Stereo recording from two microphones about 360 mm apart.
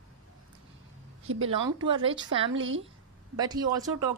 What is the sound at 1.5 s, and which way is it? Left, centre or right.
Speech, centre.